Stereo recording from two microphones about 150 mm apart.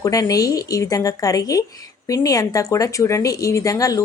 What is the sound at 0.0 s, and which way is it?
Speech, 25° left (ahead or behind).